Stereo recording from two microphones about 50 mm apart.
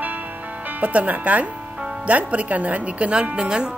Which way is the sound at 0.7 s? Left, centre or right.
Right.